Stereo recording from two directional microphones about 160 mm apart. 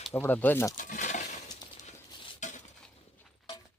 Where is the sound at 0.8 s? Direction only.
55° left (ahead or behind).